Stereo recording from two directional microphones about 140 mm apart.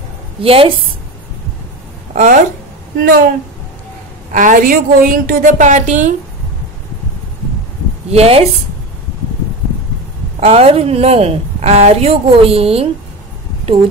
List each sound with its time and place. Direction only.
0.4 s a woman's voice: 40° right (ahead or behind)
2.1 s a woman's voice: 70° right (ahead or behind)
3.0 s speech: 90° right
4.3 s a woman's voice: 65° right (ahead or behind)
8.1 s a woman's voice: 45° right (ahead or behind)
10.4 s a woman's voice: 45° right (ahead or behind)